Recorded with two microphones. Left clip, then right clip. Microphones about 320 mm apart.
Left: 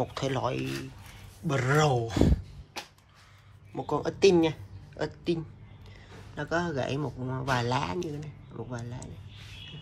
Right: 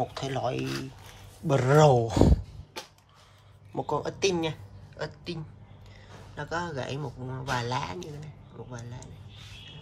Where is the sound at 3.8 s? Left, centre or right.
Centre.